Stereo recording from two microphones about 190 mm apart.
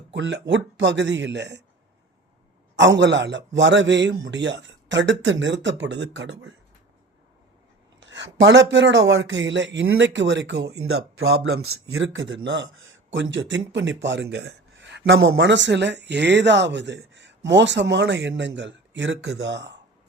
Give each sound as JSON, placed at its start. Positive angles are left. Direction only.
{"t": 0.1, "sound": "speech", "side_deg": -70}
{"t": 2.7, "sound": "speech", "side_deg": -70}
{"t": 8.0, "sound": "speech", "side_deg": -70}